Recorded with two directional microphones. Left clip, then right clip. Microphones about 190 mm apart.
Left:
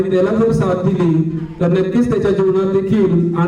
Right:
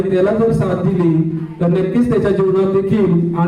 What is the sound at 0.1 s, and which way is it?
A man's voice, 55° left (ahead or behind).